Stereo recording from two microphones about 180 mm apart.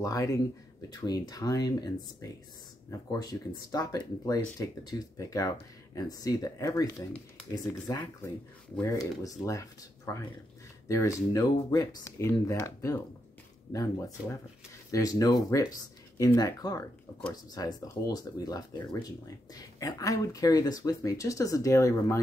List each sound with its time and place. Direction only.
0.0 s speech: 20° left (ahead or behind)